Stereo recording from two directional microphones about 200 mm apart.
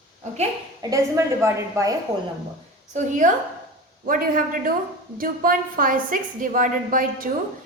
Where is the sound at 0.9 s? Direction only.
15° right (ahead or behind).